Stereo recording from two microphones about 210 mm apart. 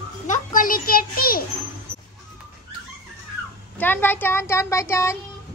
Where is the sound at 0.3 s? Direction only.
40° left (ahead or behind).